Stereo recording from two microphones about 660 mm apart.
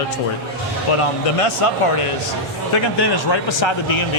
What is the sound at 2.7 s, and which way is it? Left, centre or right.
A man's voice, left.